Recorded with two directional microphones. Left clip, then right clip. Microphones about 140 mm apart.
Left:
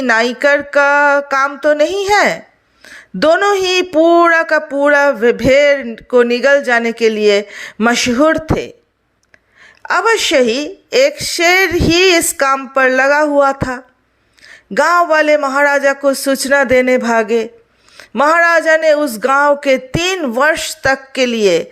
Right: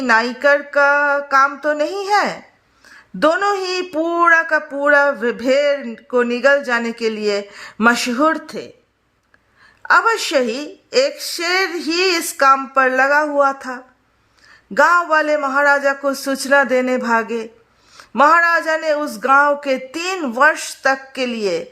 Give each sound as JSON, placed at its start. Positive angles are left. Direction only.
{"t": 0.1, "sound": "speech", "side_deg": 25}
{"t": 9.8, "sound": "speech", "side_deg": 20}